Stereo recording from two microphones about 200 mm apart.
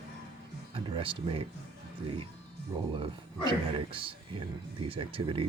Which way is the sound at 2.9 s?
25° right (ahead or behind).